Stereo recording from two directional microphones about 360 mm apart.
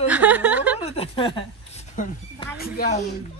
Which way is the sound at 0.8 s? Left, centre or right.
Centre.